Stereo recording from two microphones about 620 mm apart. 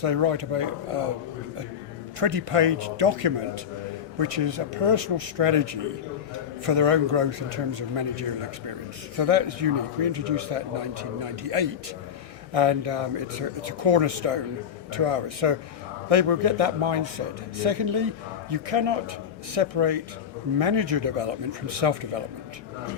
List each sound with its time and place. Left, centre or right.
0.0 s speech: right
2.1 s speech: right